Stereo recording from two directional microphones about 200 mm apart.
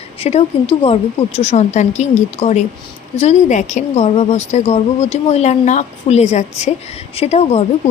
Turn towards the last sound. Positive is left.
turn(degrees=30)  # may be behind; listen again after turning